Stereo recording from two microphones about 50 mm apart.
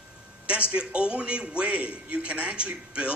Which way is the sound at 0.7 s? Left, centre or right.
Right.